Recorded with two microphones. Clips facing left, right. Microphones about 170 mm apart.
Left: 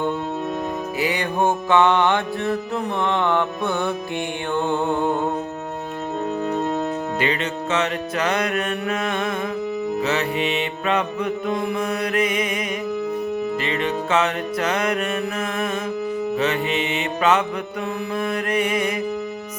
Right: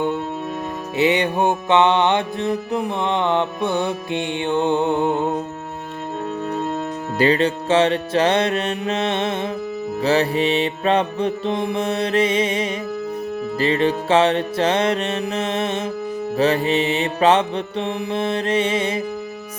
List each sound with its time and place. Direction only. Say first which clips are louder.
0.9 s music: right 6 dB; 25° right (ahead or behind)
7.2 s music: right 11 dB; 35° right (ahead or behind)